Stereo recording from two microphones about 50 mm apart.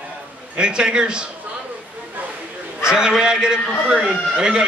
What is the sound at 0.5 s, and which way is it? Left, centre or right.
Speech, centre.